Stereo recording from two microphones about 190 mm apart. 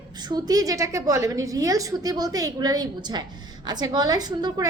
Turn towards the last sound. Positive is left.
turn(degrees=-20)  # may be behind; listen again after turning